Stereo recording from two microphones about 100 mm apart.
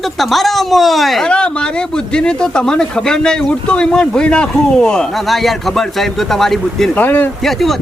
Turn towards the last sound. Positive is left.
turn(degrees=0)  # may be behind; listen again after turning